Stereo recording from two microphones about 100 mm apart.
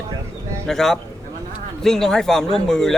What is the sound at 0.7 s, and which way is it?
A man's voice, 5° left (ahead or behind).